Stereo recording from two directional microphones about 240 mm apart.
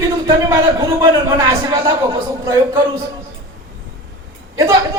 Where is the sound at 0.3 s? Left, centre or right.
Centre.